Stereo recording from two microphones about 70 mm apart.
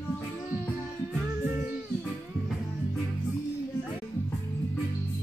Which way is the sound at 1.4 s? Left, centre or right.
Right.